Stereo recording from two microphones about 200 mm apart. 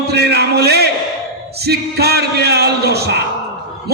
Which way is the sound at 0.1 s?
55° right (ahead or behind).